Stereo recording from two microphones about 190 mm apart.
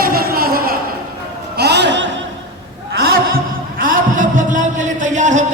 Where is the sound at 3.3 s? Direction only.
50° right (ahead or behind).